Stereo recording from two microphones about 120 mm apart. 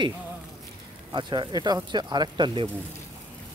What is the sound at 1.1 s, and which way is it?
Speech, 40° right (ahead or behind).